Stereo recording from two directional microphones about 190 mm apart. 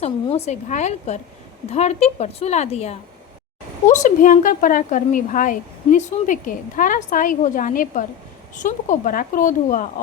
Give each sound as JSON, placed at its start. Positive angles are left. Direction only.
{"t": 0.0, "sound": "a woman's voice", "side_deg": 35}